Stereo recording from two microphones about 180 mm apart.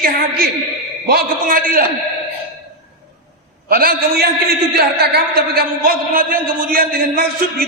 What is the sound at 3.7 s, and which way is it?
A man's voice, 55° right (ahead or behind).